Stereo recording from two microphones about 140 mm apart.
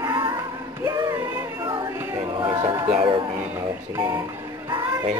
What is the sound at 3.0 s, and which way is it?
Music, 40° right (ahead or behind).